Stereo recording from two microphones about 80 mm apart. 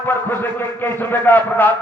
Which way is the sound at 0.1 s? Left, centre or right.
Left.